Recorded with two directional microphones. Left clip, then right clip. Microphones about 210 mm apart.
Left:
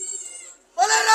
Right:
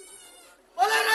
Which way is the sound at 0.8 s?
25° left (ahead or behind).